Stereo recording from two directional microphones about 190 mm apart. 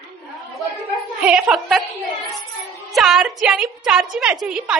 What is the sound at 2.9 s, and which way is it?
A woman's voice, 5° right (ahead or behind).